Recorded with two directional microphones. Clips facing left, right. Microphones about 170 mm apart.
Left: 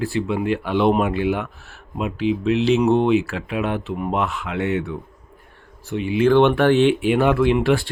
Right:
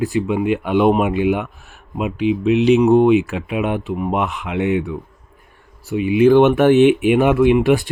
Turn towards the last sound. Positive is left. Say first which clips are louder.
# right 4 dB
turn(degrees=-15)  # may be behind; listen again after turning